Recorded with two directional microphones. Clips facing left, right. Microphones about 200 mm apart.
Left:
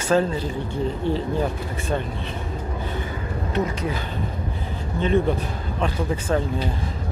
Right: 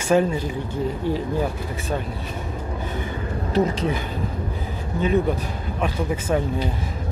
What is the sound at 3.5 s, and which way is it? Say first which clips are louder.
Speech: right 4 dB; 30° right (ahead or behind).